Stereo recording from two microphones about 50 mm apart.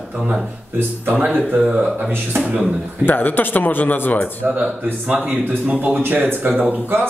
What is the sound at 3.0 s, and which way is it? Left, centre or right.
Speech, left.